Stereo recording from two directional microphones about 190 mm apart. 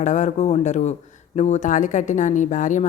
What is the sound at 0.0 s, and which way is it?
A woman's voice, 40° left (ahead or behind).